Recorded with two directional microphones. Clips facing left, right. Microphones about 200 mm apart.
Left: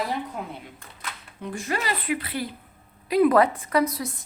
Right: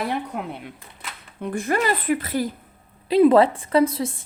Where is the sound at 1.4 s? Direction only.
55° right (ahead or behind).